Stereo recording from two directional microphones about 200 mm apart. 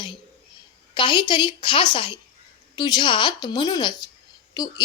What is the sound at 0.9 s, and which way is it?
A woman's voice, 25° left (ahead or behind).